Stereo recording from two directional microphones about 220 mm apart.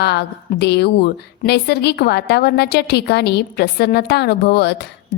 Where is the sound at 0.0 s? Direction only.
50° left (ahead or behind).